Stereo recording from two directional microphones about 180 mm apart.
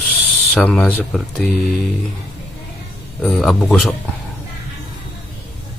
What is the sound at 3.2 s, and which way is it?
Speech, centre (ahead or behind).